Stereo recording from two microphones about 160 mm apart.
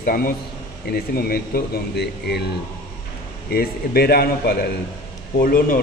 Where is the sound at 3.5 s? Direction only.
75° left (ahead or behind).